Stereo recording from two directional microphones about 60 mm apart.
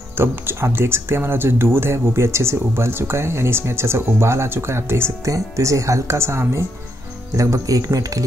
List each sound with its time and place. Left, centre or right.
0.2 s speech: right
5.2 s speech: right
7.3 s speech: right